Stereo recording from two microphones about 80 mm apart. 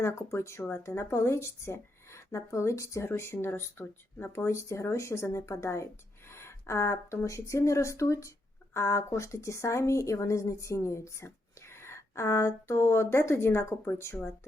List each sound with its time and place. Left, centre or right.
0.0 s speech: left